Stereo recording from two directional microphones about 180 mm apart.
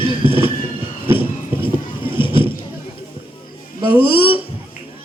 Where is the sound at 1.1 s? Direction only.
30° left (ahead or behind).